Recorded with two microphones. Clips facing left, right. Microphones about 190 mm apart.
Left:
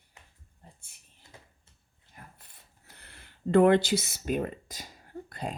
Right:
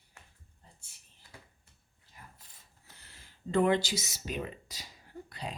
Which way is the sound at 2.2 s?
50° left (ahead or behind).